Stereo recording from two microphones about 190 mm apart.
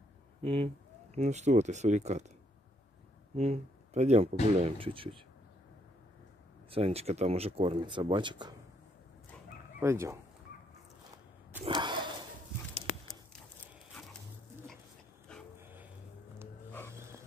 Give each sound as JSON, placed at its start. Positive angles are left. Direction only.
{"t": 0.4, "sound": "speech", "side_deg": -30}
{"t": 3.3, "sound": "speech", "side_deg": -35}
{"t": 6.7, "sound": "speech", "side_deg": -30}
{"t": 9.8, "sound": "speech", "side_deg": -15}
{"t": 11.6, "sound": "a sound", "side_deg": -25}
{"t": 15.3, "sound": "a sound", "side_deg": 5}
{"t": 15.6, "sound": "vehicle", "side_deg": -10}